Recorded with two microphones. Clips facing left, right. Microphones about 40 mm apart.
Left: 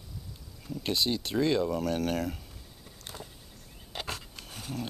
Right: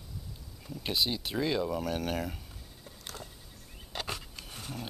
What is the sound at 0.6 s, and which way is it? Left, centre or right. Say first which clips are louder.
Speech: left 2 dB; centre.